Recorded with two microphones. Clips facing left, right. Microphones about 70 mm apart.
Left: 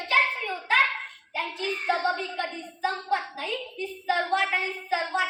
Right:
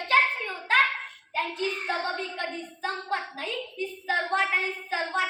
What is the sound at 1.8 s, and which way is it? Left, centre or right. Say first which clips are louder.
Child singing: left 8 dB; left.